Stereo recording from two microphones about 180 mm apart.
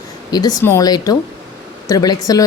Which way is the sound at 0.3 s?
20° left (ahead or behind).